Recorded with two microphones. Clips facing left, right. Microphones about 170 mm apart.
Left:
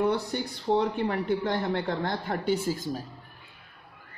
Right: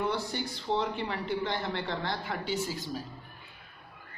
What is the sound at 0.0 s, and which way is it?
Speech, 60° left (ahead or behind).